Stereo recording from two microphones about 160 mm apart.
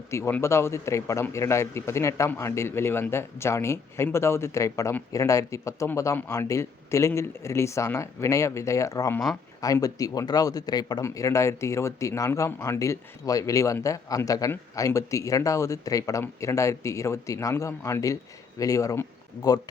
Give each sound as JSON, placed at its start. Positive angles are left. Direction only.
{"t": 0.1, "sound": "a man's voice", "side_deg": 15}